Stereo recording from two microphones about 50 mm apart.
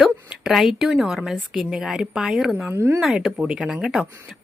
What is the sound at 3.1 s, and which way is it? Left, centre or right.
Speech, centre.